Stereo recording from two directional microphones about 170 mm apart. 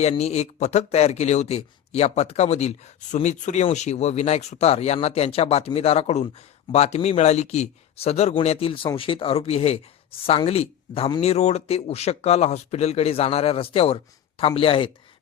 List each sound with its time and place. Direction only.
0.0 s speech: 40° left (ahead or behind)